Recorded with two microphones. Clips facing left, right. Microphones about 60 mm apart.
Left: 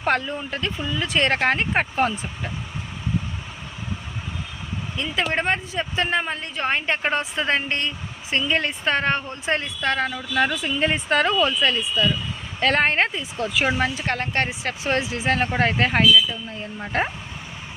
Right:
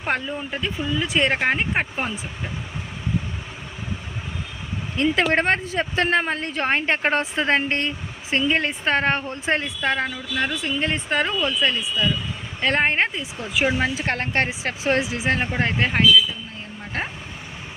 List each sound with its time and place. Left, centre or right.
0.0 s speech: centre
4.9 s a woman's voice: right
9.8 s speech: centre
10.2 s speech: centre
14.0 s speech: right
15.0 s speech: centre
15.5 s speech: centre